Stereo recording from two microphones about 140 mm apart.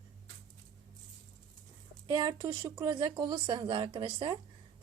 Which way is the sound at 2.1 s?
30° right (ahead or behind).